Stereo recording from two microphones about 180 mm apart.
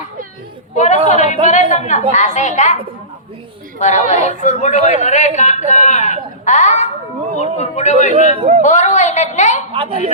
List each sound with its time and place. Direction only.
1.1 s a woman's voice: 40° left (ahead or behind)
3.8 s a woman's voice: 40° left (ahead or behind)
8.1 s speech: 35° right (ahead or behind)
8.6 s speech: 45° left (ahead or behind)
9.7 s a woman's voice: 30° right (ahead or behind)